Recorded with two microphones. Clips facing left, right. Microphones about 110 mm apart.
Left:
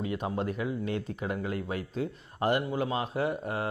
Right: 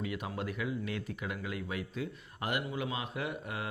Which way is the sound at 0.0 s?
30° left (ahead or behind).